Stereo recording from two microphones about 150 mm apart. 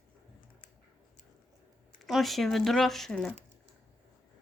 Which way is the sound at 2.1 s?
Centre (ahead or behind).